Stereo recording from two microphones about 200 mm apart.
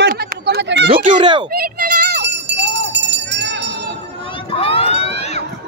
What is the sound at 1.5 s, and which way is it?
Jingle bell, 50° right (ahead or behind).